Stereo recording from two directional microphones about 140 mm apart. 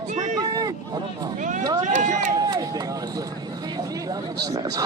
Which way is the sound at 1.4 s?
65° right (ahead or behind).